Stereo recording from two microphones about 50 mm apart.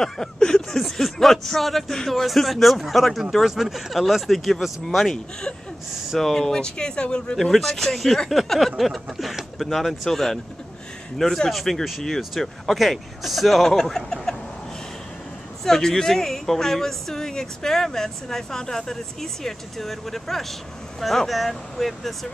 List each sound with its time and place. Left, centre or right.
0.0 s a woman's voice: centre
7.5 s speech: centre
15.6 s a woman's voice: centre